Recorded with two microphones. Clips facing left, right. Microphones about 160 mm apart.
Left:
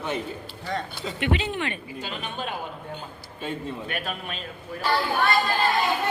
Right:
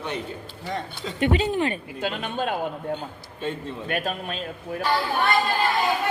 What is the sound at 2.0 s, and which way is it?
Speech, 55° right (ahead or behind).